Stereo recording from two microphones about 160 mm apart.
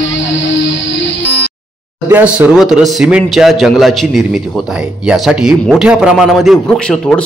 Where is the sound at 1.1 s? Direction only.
90° left.